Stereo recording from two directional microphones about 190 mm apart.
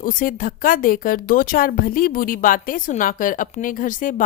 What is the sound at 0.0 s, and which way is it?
Speech, 45° left (ahead or behind).